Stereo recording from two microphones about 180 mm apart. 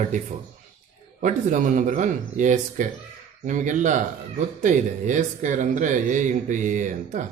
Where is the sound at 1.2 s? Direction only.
45° right (ahead or behind).